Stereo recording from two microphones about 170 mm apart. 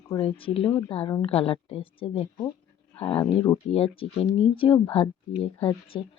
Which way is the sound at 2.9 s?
5° left (ahead or behind).